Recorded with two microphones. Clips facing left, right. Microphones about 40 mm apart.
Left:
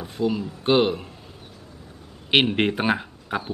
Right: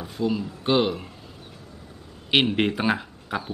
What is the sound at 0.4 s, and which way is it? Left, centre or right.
Speech, centre.